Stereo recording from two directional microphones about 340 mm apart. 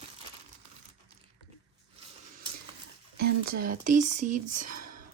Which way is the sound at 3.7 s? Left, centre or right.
Right.